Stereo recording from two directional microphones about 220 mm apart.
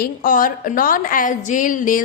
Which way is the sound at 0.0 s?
40° left (ahead or behind).